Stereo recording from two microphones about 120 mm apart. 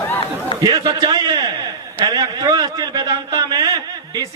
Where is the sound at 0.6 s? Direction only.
35° right (ahead or behind).